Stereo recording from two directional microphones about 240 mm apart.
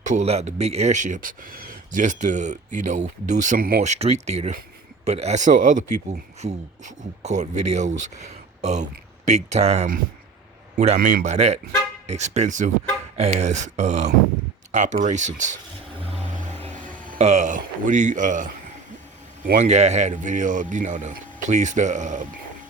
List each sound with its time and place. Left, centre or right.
0.0 s speech: right
17.1 s speech: right